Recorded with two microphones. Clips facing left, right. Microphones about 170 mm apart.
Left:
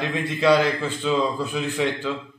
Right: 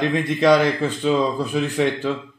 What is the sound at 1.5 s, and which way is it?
Speech, 45° right (ahead or behind).